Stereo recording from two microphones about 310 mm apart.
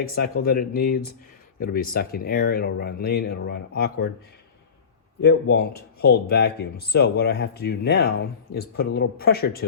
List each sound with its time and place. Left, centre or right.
0.4 s speech: left
5.2 s speech: left